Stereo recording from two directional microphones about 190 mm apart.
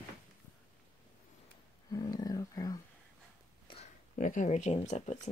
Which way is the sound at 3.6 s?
30° left (ahead or behind).